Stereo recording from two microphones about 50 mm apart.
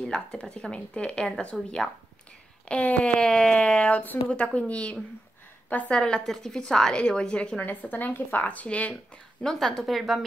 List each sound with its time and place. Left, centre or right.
0.0 s speech: centre
3.2 s a woman's voice: centre
7.5 s a woman's voice: left
9.4 s a woman's voice: centre